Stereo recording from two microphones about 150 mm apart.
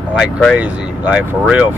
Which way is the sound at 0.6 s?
10° right (ahead or behind).